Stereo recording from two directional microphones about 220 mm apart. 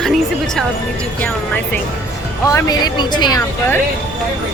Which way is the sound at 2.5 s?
15° left (ahead or behind).